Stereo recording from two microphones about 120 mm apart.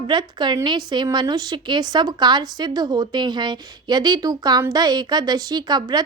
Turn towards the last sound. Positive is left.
turn(degrees=-35)  # may be behind; listen again after turning